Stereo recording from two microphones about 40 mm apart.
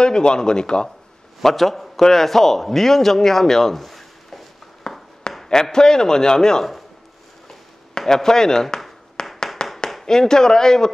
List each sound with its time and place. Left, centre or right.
0.0 s speech: centre
1.4 s a man's voice: centre
4.9 s a sound: left
5.3 s speech: centre
8.1 s speech: centre
9.2 s clapping: centre
9.6 s a sound: left
10.0 s speech: centre